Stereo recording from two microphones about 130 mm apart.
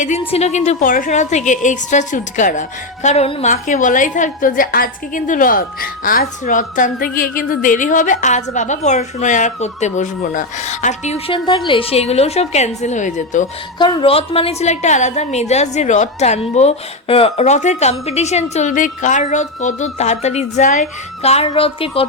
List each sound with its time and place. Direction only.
0.2 s a woman's voice: 50° left (ahead or behind); by 3.2 s 65° left (ahead or behind)
3.4 s a woman's voice: 75° left (ahead or behind); by 11.2 s 60° left (ahead or behind)
11.3 s a woman's voice: 35° left (ahead or behind); by 13.5 s 65° left (ahead or behind)
13.7 s a woman's voice: 40° left (ahead or behind); by 16.4 s 65° left (ahead or behind)
16.6 s a woman's voice: 50° left (ahead or behind)
18.5 s a woman's voice: 75° left (ahead or behind); by 22.0 s 45° left (ahead or behind)